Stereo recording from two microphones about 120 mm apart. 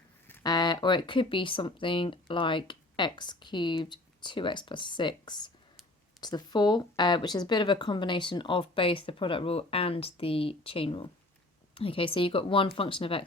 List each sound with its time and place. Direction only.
0.4 s speech: 35° left (ahead or behind)